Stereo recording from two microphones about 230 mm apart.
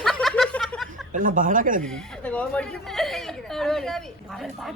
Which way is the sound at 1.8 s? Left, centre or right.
Centre.